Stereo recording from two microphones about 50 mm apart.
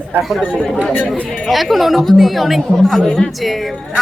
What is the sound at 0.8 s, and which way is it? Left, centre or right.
Speech, centre.